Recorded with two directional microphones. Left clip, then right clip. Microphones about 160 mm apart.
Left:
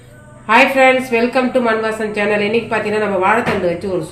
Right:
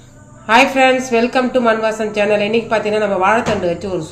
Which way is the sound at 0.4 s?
30° right (ahead or behind).